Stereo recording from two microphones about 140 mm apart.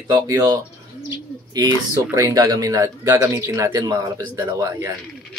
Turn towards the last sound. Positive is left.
turn(degrees=-25)  # may be behind; listen again after turning